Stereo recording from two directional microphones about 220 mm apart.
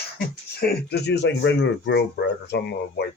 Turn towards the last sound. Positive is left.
turn(degrees=50)  # may be behind; listen again after turning